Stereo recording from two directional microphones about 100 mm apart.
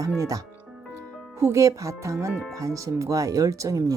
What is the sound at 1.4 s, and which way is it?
Speech, 30° right (ahead or behind).